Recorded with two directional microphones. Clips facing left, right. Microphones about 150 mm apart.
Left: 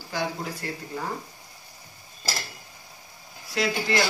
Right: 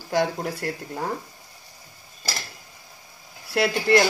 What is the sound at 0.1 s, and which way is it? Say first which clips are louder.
Speech: right 6 dB; 70° right (ahead or behind).